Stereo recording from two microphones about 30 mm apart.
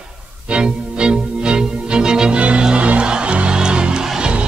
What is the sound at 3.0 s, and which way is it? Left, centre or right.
Music, right.